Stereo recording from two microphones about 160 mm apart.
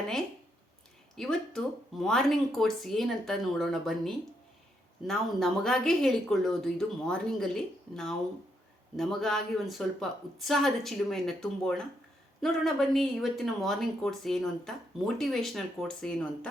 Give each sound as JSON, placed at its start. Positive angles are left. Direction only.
{"t": 1.1, "sound": "speech", "side_deg": 5}